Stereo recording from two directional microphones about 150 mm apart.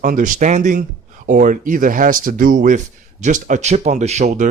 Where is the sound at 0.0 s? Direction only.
65° right (ahead or behind).